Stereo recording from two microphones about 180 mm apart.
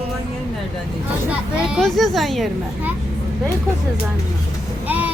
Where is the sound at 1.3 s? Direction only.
Centre (ahead or behind).